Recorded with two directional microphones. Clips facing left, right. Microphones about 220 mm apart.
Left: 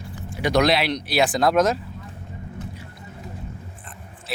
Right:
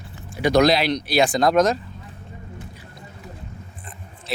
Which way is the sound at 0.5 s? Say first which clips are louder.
Right 2 dB; centre (ahead or behind).